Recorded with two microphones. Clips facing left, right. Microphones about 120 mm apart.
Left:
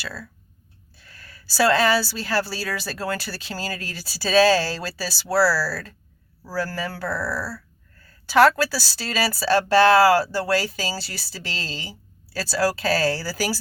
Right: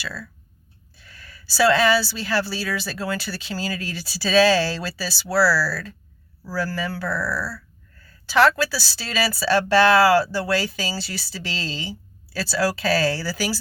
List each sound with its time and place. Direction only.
0.9 s a man's voice: 40° left (ahead or behind)
7.2 s speech: 30° left (ahead or behind)
8.0 s speech: 50° left (ahead or behind)